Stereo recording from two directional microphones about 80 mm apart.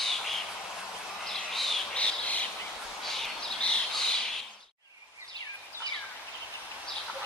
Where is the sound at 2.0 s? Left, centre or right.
Centre.